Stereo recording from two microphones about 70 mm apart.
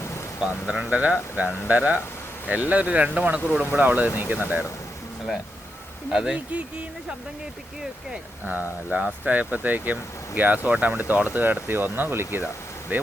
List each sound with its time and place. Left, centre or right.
0.7 s speech: centre
6.1 s speech: centre
6.5 s speech: centre
8.4 s speech: right